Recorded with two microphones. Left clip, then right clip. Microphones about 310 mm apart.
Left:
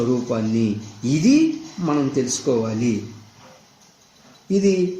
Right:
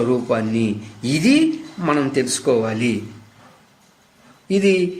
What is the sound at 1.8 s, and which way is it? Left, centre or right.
Speech, right.